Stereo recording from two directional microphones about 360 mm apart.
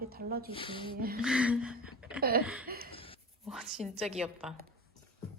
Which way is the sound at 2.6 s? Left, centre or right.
Right.